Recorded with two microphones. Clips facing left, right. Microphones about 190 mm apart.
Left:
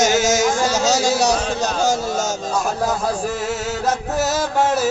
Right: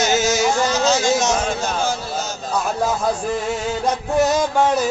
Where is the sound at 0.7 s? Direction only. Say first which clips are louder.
Even; 40° left (ahead or behind).